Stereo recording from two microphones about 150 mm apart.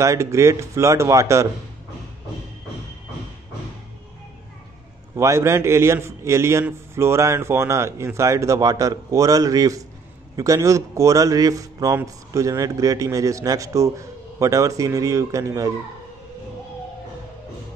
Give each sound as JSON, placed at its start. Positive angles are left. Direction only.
{"t": 0.0, "sound": "speech", "side_deg": -20}
{"t": 5.1, "sound": "speech", "side_deg": -20}